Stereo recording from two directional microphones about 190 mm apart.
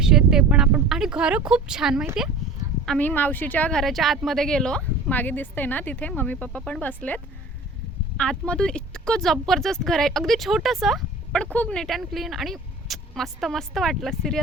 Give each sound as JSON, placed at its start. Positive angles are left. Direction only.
{"t": 0.0, "sound": "a woman's voice", "side_deg": -5}